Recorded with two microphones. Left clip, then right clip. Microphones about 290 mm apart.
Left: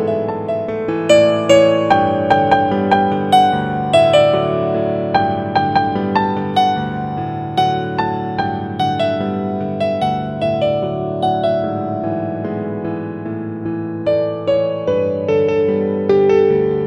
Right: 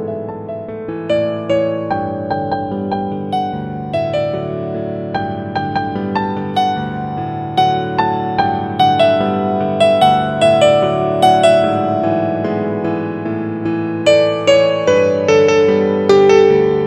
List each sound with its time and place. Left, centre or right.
1.0 s music: left
2.9 s music: left
5.8 s music: centre
7.5 s music: centre; by 11.3 s right
11.3 s music: right
14.0 s music: right; by 16.8 s centre